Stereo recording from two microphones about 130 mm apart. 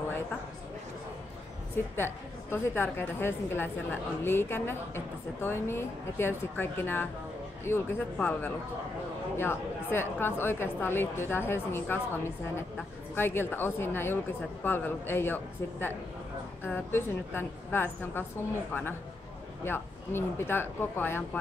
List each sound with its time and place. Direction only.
2.5 s a woman's voice: 15° left (ahead or behind)
13.1 s a woman's voice: 15° left (ahead or behind)